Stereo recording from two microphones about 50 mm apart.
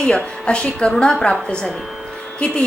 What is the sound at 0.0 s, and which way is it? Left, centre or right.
A woman's voice, centre.